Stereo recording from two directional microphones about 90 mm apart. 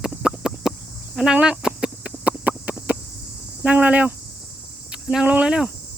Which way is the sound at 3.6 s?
15° right (ahead or behind).